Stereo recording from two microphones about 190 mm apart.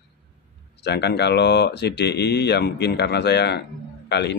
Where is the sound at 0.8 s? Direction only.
60° left (ahead or behind).